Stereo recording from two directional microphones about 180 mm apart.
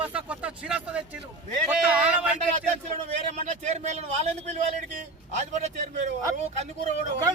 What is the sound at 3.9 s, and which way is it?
A man's voice, 40° right (ahead or behind).